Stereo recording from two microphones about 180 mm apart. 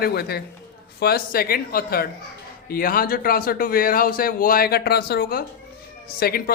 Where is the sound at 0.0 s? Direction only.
60° left (ahead or behind).